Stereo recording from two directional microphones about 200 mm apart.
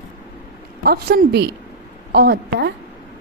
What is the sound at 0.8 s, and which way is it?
A woman's voice, 50° right (ahead or behind).